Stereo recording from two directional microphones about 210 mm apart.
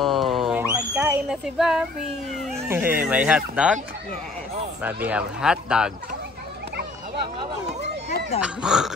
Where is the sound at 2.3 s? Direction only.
Centre (ahead or behind).